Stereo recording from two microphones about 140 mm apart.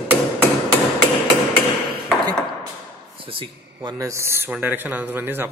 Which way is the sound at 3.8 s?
25° right (ahead or behind).